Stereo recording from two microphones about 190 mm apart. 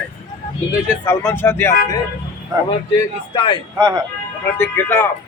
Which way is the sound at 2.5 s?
20° right (ahead or behind).